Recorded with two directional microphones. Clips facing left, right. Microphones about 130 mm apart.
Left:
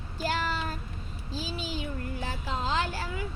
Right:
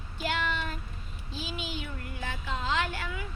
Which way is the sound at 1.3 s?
35° left (ahead or behind).